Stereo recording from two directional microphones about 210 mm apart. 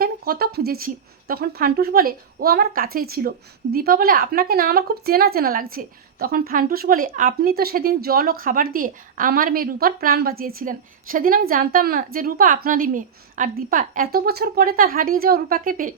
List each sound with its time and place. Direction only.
0.0 s a woman's voice: 45° right (ahead or behind)